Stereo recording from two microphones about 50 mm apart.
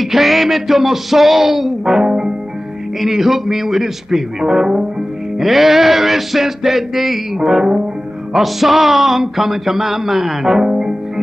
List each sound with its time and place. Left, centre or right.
0.0 s speech: centre
10.7 s guitar: centre